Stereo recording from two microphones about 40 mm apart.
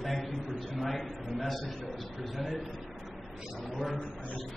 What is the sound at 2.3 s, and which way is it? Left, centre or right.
Speech, centre.